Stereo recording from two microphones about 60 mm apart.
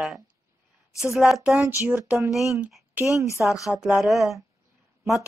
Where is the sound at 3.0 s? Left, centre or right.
Right.